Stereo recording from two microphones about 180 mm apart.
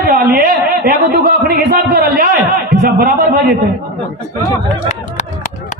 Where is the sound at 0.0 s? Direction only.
50° right (ahead or behind).